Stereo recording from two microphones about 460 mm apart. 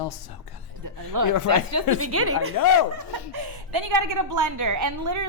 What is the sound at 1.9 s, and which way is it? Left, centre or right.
Speech, right.